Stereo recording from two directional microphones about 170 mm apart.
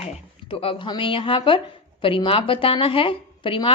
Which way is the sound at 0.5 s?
35° left (ahead or behind).